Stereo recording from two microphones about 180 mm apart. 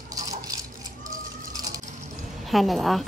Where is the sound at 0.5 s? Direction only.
20° right (ahead or behind).